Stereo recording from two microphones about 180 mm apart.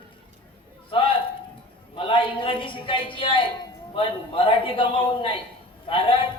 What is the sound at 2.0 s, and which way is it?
A man's voice, 30° left (ahead or behind).